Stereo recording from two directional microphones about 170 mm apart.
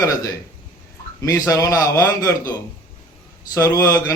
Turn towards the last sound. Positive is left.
turn(degrees=20)  # may be behind; listen again after turning